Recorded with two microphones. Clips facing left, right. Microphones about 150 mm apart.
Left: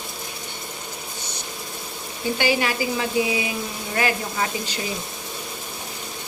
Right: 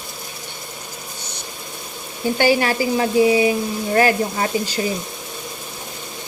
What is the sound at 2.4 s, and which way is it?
Frying, 40° right (ahead or behind).